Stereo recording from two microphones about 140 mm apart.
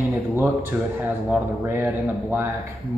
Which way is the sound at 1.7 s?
15° right (ahead or behind).